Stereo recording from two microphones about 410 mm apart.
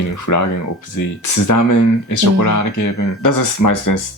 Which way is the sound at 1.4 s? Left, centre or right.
Left.